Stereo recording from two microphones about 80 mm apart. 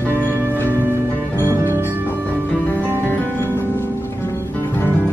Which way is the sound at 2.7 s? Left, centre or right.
Left.